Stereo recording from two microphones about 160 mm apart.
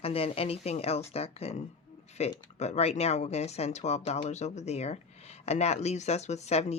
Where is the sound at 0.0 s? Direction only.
35° left (ahead or behind).